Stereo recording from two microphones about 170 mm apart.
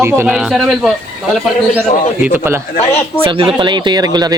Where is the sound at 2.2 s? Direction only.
10° right (ahead or behind).